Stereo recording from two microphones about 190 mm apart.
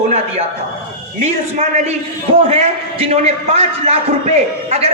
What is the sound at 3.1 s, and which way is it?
A man's voice, 35° right (ahead or behind).